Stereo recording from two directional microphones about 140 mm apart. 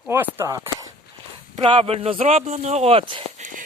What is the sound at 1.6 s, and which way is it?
Speech, 40° right (ahead or behind).